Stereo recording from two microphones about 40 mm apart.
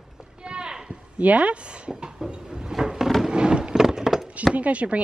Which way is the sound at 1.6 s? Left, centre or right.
Right.